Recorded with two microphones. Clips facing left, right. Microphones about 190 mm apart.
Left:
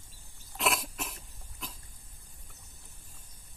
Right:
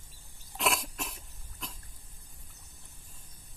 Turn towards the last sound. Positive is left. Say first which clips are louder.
# even
turn(degrees=0)  # may be behind; listen again after turning